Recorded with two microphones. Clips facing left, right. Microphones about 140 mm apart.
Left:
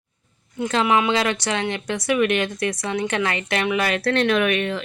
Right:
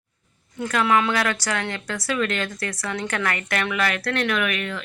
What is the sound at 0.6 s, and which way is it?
Speech, 20° left (ahead or behind).